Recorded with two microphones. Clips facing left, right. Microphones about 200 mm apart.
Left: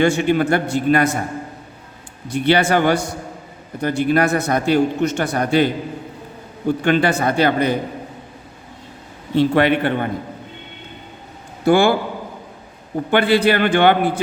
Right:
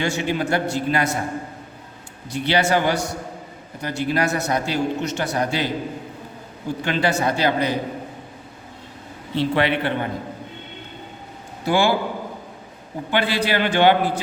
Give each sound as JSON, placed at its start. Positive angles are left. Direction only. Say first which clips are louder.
{"t": 0.0, "sound": "a man's voice", "louder": "left 7 dB", "side_deg": 55}
{"t": 2.3, "sound": "a man's voice", "louder": "left 4 dB", "side_deg": 55}
{"t": 9.3, "sound": "a man's voice", "louder": "left 5 dB", "side_deg": 50}
{"t": 11.6, "sound": "a man's voice", "louder": "left 5 dB", "side_deg": 50}
{"t": 13.1, "sound": "a man's voice", "louder": "left 6 dB", "side_deg": 50}